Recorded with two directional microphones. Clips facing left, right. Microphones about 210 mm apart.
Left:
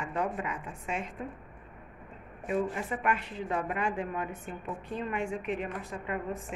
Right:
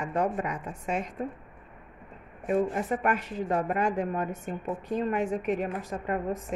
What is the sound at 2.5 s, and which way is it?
A woman's voice, 45° right (ahead or behind).